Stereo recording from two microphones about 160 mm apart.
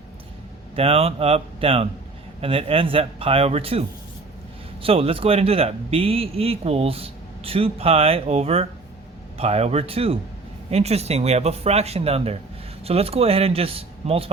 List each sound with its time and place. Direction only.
0.8 s a man's voice: 40° right (ahead or behind)